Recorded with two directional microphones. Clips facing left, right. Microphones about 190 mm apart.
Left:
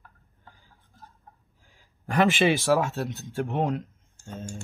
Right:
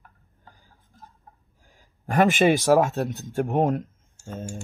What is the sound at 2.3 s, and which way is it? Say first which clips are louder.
Speech: right 4 dB; 45° right (ahead or behind).